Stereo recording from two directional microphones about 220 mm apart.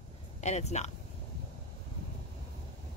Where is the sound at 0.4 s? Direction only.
30° left (ahead or behind).